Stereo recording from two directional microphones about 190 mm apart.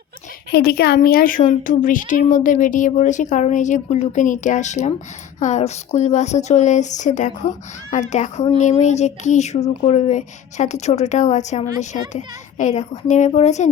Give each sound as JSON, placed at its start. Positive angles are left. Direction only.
{"t": 0.5, "sound": "speech", "side_deg": 55}